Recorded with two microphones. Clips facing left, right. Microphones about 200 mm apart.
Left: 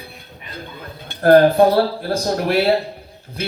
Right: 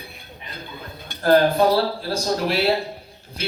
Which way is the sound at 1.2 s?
55° left (ahead or behind).